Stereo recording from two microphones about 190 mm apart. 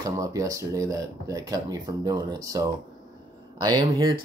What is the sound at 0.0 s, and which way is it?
Speech, 15° right (ahead or behind).